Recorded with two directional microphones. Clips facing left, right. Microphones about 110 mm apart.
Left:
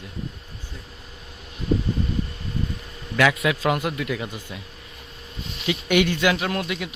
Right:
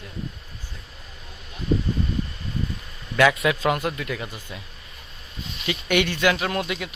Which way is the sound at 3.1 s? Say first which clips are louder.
Right 1 dB; centre (ahead or behind).